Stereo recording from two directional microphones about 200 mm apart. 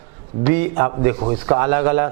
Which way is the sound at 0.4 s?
15° right (ahead or behind).